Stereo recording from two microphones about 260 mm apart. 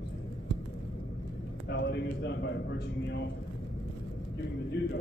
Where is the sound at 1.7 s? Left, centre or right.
Left.